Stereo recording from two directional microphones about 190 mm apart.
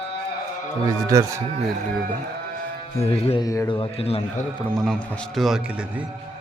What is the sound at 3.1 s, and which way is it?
A man's voice, 30° left (ahead or behind).